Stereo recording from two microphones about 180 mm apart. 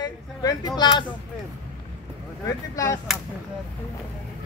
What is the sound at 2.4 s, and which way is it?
Speech, 20° left (ahead or behind).